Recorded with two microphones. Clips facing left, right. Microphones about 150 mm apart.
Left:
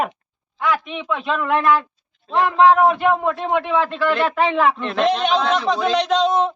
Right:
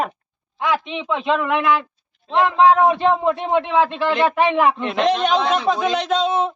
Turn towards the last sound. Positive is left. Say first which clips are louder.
# left 2 dB
turn(degrees=-5)  # may be behind; listen again after turning